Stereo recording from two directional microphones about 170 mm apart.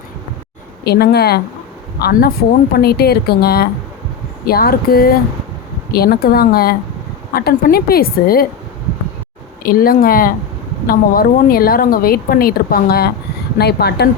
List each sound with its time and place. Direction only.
0.9 s a woman's voice: 70° left (ahead or behind)
9.6 s a woman's voice: 60° left (ahead or behind)